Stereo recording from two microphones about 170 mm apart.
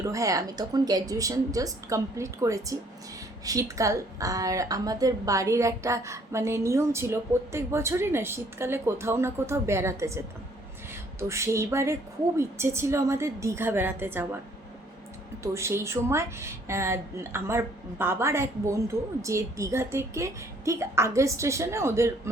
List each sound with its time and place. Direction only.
0.0 s a woman's voice: 20° right (ahead or behind)
11.2 s a woman's voice: 15° right (ahead or behind)
15.5 s a woman's voice: 15° right (ahead or behind)